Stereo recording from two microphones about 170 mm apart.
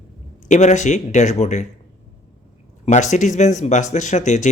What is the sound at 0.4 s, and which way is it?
Speech, 45° left (ahead or behind).